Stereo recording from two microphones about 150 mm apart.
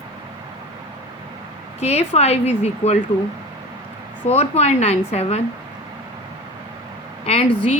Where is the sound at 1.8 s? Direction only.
45° left (ahead or behind).